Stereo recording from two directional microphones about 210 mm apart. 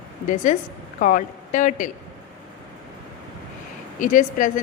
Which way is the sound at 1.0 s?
40° left (ahead or behind).